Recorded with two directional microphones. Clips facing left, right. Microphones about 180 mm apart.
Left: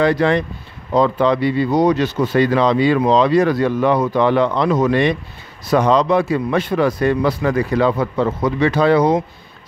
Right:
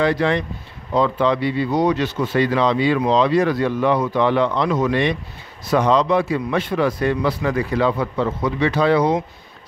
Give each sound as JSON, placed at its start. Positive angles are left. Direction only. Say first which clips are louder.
{"t": 0.0, "sound": "a man's voice", "louder": "left 3 dB", "side_deg": 45}